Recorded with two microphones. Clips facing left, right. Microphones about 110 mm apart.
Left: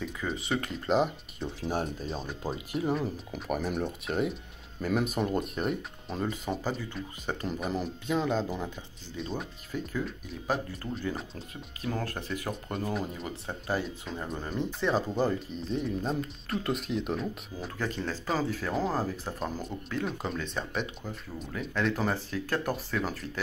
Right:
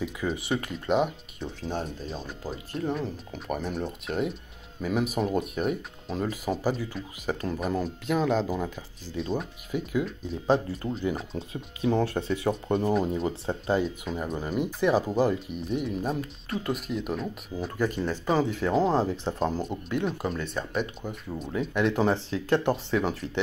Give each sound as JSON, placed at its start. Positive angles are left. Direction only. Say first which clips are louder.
{"t": 0.0, "sound": "speech", "louder": "right 4 dB", "side_deg": -5}
{"t": 10.4, "sound": "speech", "louder": "right 7 dB", "side_deg": -25}
{"t": 14.0, "sound": "speech", "louder": "right 5 dB", "side_deg": -5}
{"t": 17.7, "sound": "speech", "louder": "right 5 dB", "side_deg": -10}
{"t": 20.1, "sound": "speech", "louder": "right 3 dB", "side_deg": -5}
{"t": 21.0, "sound": "speech", "louder": "right 5 dB", "side_deg": -20}